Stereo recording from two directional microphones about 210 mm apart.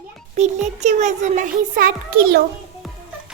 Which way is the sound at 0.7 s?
35° right (ahead or behind).